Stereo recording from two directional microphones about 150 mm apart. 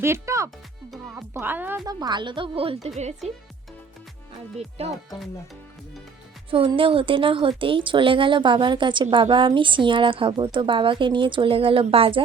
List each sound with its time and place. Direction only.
0.0 s speech: 20° right (ahead or behind)
1.8 s a woman's voice: 25° right (ahead or behind)
6.5 s a woman's voice: 35° right (ahead or behind)